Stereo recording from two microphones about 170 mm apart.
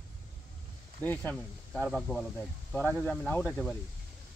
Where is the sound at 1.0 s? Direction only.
5° left (ahead or behind).